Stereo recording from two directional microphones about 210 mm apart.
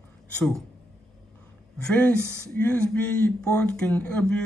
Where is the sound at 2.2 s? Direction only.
10° right (ahead or behind).